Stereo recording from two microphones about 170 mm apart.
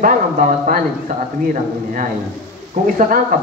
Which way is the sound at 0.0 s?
55° right (ahead or behind).